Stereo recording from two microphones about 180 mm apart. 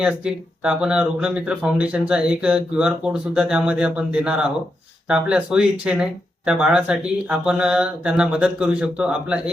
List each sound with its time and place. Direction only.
0.0 s speech: 5° right (ahead or behind)